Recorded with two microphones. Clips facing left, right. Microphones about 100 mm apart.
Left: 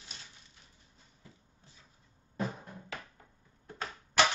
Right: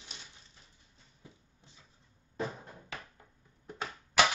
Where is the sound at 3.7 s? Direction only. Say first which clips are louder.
Right 1 dB; 15° right (ahead or behind).